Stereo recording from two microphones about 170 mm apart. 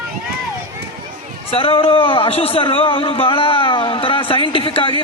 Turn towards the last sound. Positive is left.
turn(degrees=30)  # may be behind; listen again after turning